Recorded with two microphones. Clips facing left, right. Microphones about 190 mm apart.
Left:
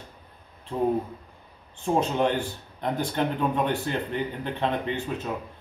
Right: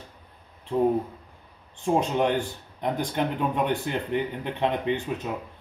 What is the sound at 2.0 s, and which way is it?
Speech, 15° right (ahead or behind).